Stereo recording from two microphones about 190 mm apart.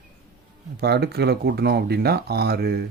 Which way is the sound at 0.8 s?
60° right (ahead or behind).